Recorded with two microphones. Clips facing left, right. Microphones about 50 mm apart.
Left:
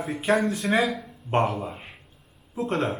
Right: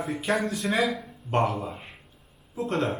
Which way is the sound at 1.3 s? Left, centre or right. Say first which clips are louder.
Left 1 dB; left.